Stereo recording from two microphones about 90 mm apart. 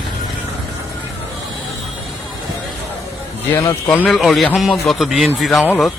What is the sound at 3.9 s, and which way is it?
Speech, 15° left (ahead or behind).